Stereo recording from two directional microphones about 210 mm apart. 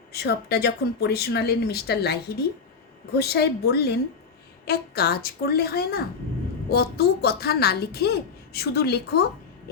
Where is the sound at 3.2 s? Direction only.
50° left (ahead or behind).